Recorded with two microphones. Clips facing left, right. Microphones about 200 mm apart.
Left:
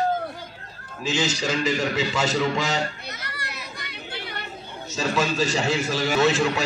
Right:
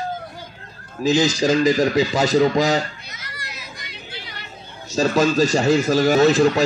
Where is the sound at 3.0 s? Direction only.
60° left (ahead or behind).